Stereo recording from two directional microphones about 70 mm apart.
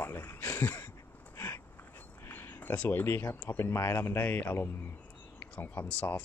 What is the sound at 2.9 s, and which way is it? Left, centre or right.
Speech, left.